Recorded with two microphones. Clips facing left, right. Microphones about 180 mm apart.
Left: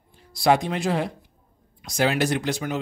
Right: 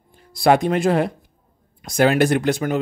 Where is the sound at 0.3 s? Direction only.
55° right (ahead or behind).